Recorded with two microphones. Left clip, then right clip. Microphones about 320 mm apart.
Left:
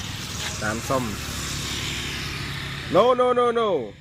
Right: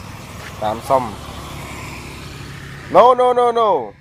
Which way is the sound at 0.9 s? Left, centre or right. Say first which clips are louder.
Right 8 dB; right.